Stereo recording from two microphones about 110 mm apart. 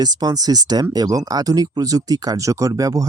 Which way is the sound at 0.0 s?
35° right (ahead or behind).